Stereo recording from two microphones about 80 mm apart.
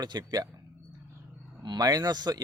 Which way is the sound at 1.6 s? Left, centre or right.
Right.